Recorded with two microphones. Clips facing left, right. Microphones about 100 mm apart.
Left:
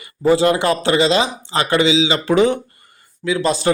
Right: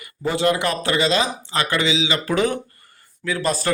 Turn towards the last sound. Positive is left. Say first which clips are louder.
# left 4 dB
turn(degrees=20)  # may be behind; listen again after turning